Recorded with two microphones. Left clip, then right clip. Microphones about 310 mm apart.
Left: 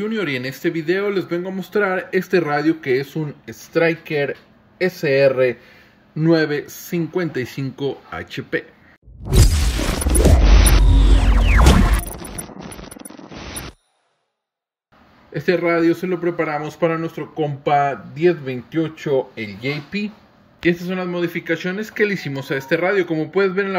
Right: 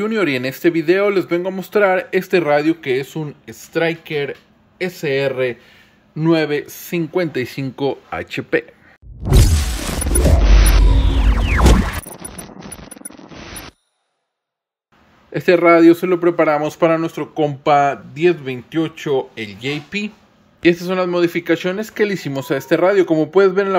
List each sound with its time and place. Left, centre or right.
0.0 s speech: centre
9.2 s shatter: centre
10.4 s a sound: centre
15.3 s speech: centre